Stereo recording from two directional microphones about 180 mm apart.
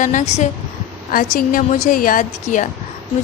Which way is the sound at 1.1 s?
50° left (ahead or behind).